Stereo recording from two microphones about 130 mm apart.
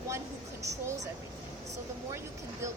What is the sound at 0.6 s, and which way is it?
Speech, 25° right (ahead or behind).